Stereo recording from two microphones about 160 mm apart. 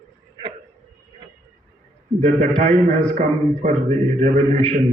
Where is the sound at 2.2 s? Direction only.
45° right (ahead or behind).